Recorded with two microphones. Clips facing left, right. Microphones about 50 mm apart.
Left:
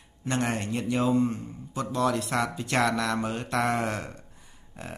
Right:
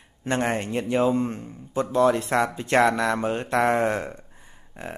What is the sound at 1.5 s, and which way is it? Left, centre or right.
Speech, right.